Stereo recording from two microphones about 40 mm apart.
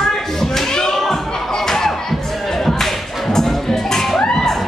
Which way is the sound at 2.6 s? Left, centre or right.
Centre.